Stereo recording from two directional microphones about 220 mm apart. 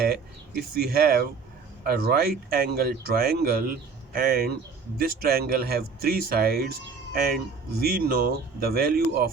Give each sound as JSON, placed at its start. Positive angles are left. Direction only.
{"t": 0.0, "sound": "speech", "side_deg": -45}